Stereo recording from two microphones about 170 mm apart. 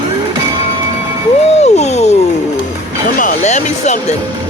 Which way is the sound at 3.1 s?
50° left (ahead or behind).